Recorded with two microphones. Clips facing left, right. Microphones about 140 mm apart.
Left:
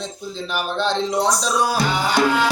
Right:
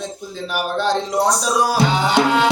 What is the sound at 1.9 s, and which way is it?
Music, 25° right (ahead or behind).